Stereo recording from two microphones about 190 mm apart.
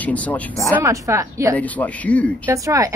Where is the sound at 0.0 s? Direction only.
10° left (ahead or behind).